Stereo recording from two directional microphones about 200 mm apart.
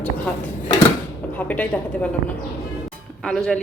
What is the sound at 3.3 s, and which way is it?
Speech, centre (ahead or behind).